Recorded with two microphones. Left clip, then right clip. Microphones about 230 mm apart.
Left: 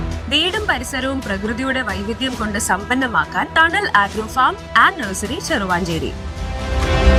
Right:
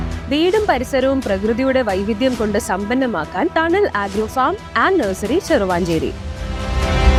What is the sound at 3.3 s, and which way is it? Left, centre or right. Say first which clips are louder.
Speech: right 1 dB; left.